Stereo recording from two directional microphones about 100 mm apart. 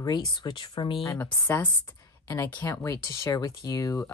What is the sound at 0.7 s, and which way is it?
Speech, 60° left (ahead or behind).